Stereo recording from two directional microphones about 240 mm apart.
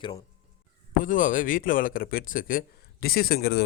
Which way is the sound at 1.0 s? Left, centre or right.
Left.